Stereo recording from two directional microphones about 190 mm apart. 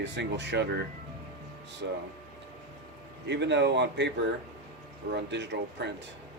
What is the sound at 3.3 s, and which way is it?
Speech, 65° right (ahead or behind).